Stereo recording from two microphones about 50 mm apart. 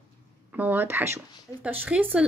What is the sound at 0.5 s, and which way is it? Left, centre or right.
Speech, right.